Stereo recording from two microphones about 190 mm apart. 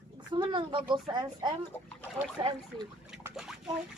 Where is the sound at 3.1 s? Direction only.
5° right (ahead or behind).